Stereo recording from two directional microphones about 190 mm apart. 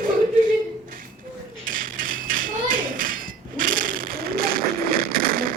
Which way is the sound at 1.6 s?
45° right (ahead or behind).